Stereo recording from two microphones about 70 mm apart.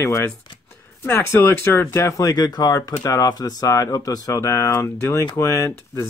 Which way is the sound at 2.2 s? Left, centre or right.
Left.